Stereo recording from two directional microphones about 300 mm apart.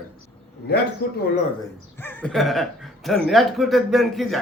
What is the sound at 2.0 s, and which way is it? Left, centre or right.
A man's voice, centre.